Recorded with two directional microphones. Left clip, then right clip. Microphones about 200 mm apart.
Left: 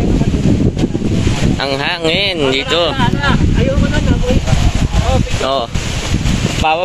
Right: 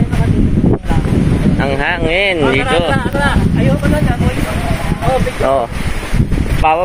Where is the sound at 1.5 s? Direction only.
25° left (ahead or behind).